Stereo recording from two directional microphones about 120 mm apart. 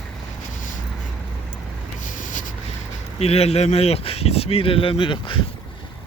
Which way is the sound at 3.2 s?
60° left (ahead or behind).